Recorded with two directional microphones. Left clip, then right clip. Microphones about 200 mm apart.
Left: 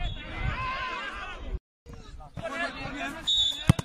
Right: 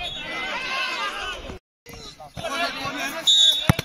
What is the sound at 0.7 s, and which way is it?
Chatter, 10° left (ahead or behind).